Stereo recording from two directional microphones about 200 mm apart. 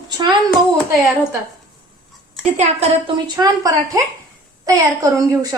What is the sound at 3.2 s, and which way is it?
A woman's voice, 20° right (ahead or behind).